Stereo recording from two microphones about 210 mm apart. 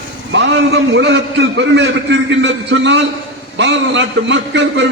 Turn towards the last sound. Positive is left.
turn(degrees=-60)  # may be behind; listen again after turning